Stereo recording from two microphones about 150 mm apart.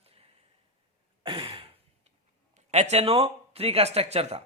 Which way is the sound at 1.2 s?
35° right (ahead or behind).